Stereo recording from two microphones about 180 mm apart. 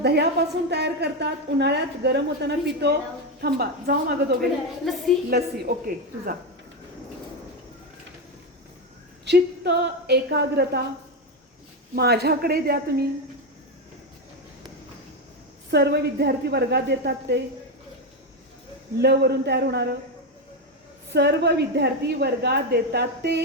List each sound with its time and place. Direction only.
0.0 s a woman's voice: 65° right (ahead or behind)
4.8 s a woman's voice: centre (ahead or behind)
5.3 s a woman's voice: 55° right (ahead or behind)
9.2 s a woman's voice: 70° right (ahead or behind)
11.9 s a woman's voice: 60° right (ahead or behind)
15.7 s a woman's voice: 65° right (ahead or behind)
18.9 s a woman's voice: 65° right (ahead or behind)
21.1 s a woman's voice: 70° right (ahead or behind)